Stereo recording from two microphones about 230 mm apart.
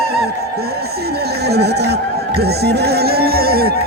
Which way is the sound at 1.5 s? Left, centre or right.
Right.